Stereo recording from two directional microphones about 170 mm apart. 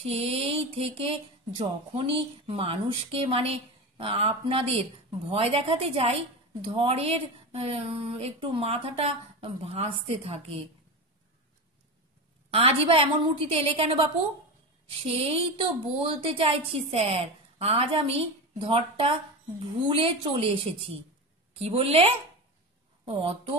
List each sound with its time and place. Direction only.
0.0 s speech: 35° right (ahead or behind)
12.4 s speech: 35° right (ahead or behind)